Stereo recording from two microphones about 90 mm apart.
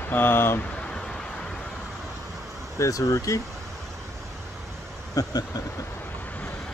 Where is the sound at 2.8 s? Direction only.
40° left (ahead or behind).